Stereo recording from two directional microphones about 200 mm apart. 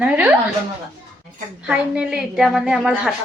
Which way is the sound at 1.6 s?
5° right (ahead or behind).